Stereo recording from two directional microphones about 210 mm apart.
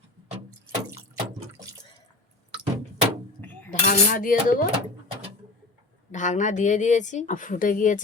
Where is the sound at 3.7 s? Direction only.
40° left (ahead or behind).